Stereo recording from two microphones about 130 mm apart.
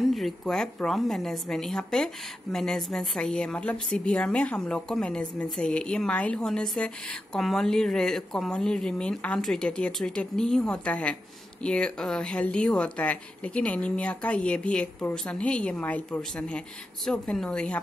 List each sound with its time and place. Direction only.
0.1 s a woman's voice: centre (ahead or behind)